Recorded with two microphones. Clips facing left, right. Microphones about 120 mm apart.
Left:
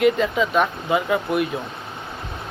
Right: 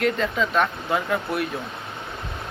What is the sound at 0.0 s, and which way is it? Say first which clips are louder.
Speech: left 4 dB; 5° left (ahead or behind).